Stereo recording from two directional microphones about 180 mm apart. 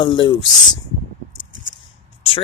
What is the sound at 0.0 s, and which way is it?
Speech, 25° left (ahead or behind).